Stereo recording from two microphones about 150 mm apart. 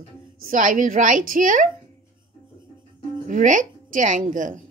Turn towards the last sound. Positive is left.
turn(degrees=-60)  # may be behind; listen again after turning